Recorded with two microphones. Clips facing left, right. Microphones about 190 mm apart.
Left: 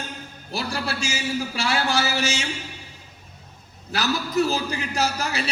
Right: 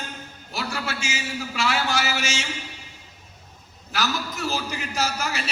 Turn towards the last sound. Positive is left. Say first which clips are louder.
# left 2 dB
turn(degrees=35)  # may be behind; listen again after turning